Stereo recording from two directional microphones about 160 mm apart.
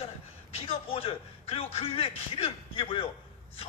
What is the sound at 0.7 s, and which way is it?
Speech, 35° left (ahead or behind).